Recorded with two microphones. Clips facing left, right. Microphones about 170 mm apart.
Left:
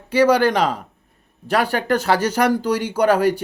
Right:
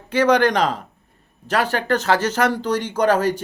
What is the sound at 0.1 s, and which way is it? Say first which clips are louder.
Speech: left 1 dB; 10° left (ahead or behind).